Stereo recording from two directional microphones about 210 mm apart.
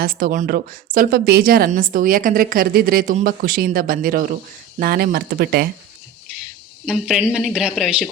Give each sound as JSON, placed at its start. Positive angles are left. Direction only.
{"t": 0.0, "sound": "a woman's voice", "side_deg": -45}
{"t": 6.8, "sound": "speech", "side_deg": -5}